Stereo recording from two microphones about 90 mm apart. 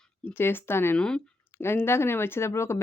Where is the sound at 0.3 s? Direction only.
25° left (ahead or behind).